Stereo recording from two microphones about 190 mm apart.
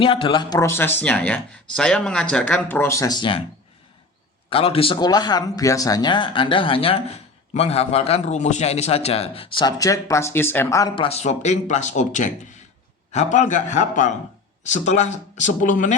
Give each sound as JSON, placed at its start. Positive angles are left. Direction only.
{"t": 0.0, "sound": "a man's voice", "side_deg": 25}
{"t": 4.4, "sound": "a man's voice", "side_deg": 30}